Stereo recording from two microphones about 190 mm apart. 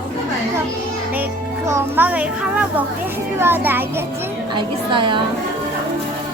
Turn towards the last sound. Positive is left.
turn(degrees=-25)  # may be behind; listen again after turning